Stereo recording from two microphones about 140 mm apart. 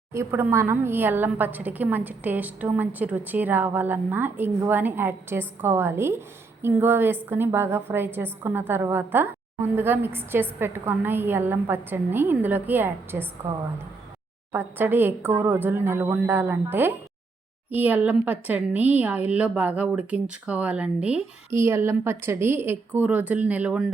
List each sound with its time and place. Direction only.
0.1 s a woman's voice: 20° right (ahead or behind)
14.5 s a woman's voice: 15° right (ahead or behind)
21.5 s a woman's voice: 20° right (ahead or behind)